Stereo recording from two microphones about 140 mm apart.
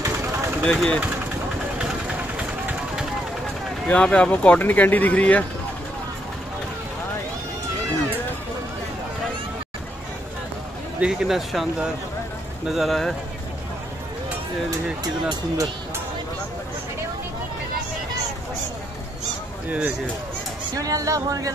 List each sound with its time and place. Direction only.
0.0 s vehicle: 20° right (ahead or behind)
0.7 s speech: 5° left (ahead or behind)
1.8 s vehicle: 10° right (ahead or behind)
3.8 s speech: 5° left (ahead or behind)
11.0 s speech: 5° right (ahead or behind)
15.2 s speech: 25° right (ahead or behind)
20.7 s speech: 25° right (ahead or behind)